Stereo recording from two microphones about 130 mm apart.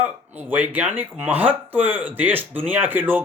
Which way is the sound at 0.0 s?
15° right (ahead or behind).